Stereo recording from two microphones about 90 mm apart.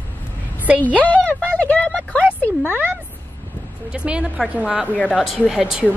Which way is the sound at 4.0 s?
10° right (ahead or behind).